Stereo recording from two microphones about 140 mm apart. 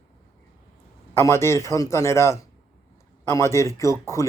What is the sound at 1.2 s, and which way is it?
Speech, 20° left (ahead or behind).